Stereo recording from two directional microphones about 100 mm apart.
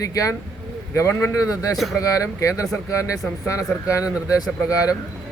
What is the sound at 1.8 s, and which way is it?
Speech, centre (ahead or behind).